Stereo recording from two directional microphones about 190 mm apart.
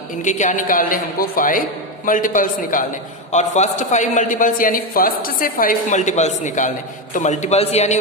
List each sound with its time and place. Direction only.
0.2 s a man's voice: 40° left (ahead or behind)